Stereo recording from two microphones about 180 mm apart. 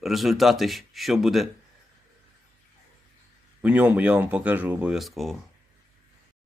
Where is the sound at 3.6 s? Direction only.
10° right (ahead or behind).